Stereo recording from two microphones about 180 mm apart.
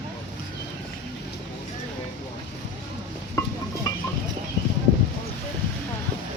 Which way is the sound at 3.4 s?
15° left (ahead or behind).